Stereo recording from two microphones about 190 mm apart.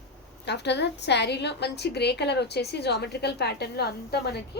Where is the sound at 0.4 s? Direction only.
65° left (ahead or behind).